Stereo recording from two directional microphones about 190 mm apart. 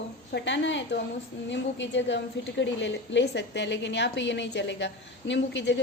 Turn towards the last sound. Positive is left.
turn(degrees=65)  # may be behind; listen again after turning